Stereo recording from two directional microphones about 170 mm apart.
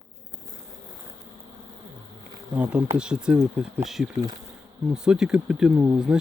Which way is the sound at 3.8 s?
Centre (ahead or behind).